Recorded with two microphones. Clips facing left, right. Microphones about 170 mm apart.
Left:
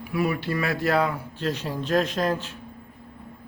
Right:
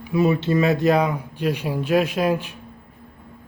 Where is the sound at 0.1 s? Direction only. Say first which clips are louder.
Right 7 dB; 25° right (ahead or behind).